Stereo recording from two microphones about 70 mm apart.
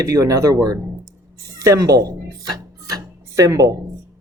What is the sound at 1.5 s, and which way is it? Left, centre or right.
Speech, right.